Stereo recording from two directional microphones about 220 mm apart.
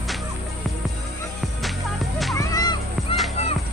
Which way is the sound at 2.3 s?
15° left (ahead or behind).